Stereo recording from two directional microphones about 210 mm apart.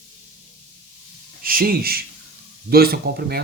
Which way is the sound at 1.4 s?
45° right (ahead or behind).